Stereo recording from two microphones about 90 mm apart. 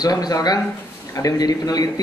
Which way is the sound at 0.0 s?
45° left (ahead or behind).